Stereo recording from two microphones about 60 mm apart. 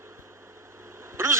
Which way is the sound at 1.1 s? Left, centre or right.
Right.